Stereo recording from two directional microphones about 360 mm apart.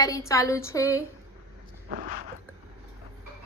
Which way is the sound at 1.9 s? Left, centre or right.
Right.